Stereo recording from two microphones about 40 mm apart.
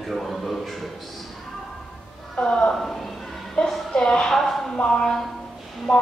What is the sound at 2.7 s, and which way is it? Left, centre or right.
Speech, centre.